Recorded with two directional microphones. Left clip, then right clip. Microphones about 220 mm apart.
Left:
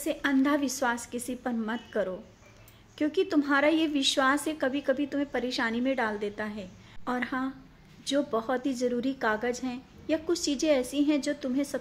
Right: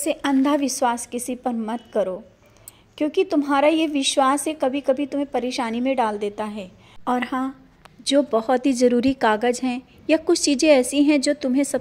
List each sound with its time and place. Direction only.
0.0 s a woman's voice: 30° right (ahead or behind)